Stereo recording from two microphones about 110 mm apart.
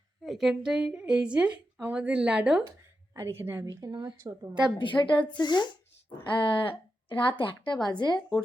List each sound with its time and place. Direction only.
0.2 s speech: centre (ahead or behind)
3.2 s a woman's voice: 20° right (ahead or behind)
4.8 s a woman's voice: 50° left (ahead or behind)